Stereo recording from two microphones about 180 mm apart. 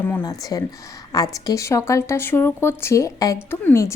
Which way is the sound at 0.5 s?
20° left (ahead or behind).